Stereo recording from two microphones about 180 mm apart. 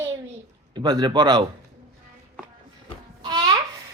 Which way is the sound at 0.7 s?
25° right (ahead or behind).